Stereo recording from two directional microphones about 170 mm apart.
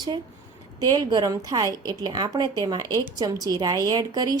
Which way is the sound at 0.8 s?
20° right (ahead or behind).